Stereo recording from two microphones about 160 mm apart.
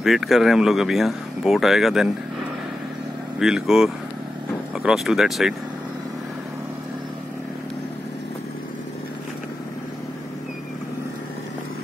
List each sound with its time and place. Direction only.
0.0 s speech: centre (ahead or behind)
3.3 s speech: 5° right (ahead or behind)